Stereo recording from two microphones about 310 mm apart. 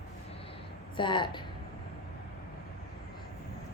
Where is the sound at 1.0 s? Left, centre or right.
Centre.